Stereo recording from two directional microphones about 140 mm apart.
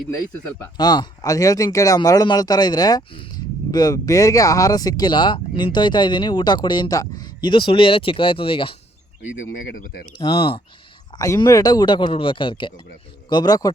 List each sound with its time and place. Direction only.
0.1 s speech: 20° left (ahead or behind)
0.8 s speech: 30° left (ahead or behind)
10.2 s speech: 40° left (ahead or behind)
11.1 s speech: 30° left (ahead or behind)